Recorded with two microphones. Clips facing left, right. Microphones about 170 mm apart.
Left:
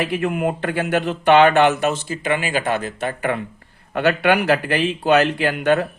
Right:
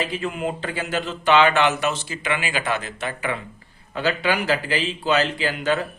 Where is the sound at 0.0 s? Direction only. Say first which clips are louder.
Left 5 dB; 60° left (ahead or behind).